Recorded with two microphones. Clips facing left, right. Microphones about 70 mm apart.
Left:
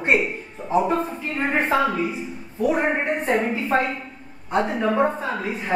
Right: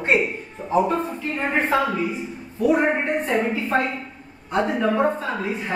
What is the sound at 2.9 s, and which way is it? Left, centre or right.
Speech, left.